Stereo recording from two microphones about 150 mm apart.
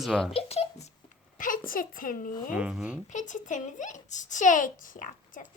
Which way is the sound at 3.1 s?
55° left (ahead or behind).